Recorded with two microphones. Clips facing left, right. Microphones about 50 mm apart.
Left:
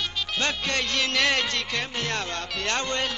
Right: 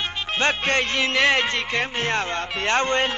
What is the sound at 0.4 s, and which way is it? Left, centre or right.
Speech, right.